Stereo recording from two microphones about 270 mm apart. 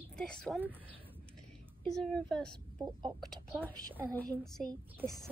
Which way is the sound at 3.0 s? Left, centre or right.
Centre.